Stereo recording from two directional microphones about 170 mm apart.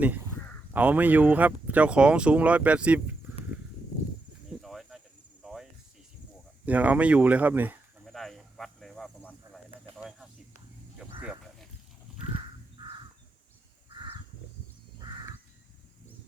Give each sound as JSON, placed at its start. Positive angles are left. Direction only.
{"t": 0.7, "sound": "speech", "side_deg": -10}
{"t": 4.6, "sound": "cricket", "side_deg": 0}
{"t": 6.7, "sound": "speech", "side_deg": -10}
{"t": 8.0, "sound": "cricket", "side_deg": 0}
{"t": 10.0, "sound": "a sound", "side_deg": -5}
{"t": 12.7, "sound": "crow", "side_deg": -30}